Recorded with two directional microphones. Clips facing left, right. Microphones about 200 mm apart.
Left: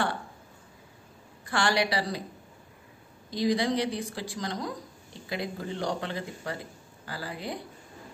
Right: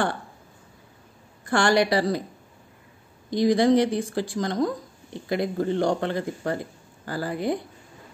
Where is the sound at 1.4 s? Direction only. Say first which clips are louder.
Right 6 dB; 50° right (ahead or behind).